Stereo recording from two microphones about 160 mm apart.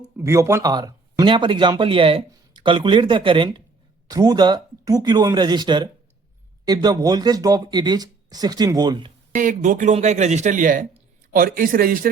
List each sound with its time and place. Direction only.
0.2 s speech: 20° right (ahead or behind)
9.3 s a man's voice: 55° right (ahead or behind)